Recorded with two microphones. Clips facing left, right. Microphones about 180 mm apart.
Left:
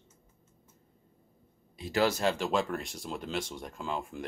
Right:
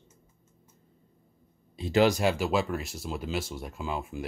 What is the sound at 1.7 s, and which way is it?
Speech, 25° right (ahead or behind).